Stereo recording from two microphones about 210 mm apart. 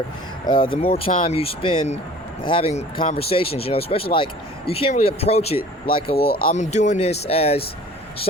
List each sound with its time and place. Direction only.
0.4 s speech: 20° left (ahead or behind)
6.1 s speech: 45° left (ahead or behind); by 7.6 s 30° left (ahead or behind)